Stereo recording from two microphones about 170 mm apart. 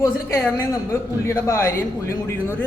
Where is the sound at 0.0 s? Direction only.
15° left (ahead or behind).